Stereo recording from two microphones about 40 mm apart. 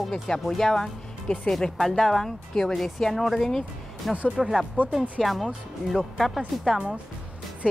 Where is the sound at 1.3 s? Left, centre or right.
Left.